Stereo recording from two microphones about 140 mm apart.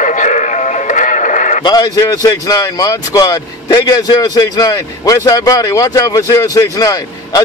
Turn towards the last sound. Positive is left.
turn(degrees=25)  # may be behind; listen again after turning